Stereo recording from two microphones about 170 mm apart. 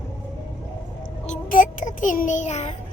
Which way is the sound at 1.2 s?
50° left (ahead or behind).